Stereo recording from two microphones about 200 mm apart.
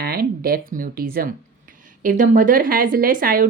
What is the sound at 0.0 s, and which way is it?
A woman's voice, 50° right (ahead or behind).